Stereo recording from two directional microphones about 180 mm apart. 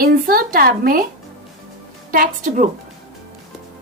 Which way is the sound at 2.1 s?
50° right (ahead or behind).